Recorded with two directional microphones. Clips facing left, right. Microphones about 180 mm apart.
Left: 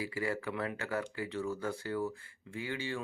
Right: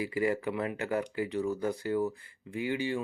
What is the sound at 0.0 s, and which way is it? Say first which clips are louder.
Speech: right 6 dB; 15° right (ahead or behind).